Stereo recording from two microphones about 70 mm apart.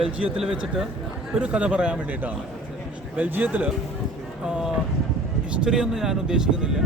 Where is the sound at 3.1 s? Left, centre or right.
Right.